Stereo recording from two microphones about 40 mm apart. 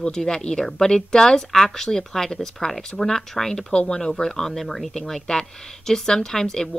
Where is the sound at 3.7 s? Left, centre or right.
Left.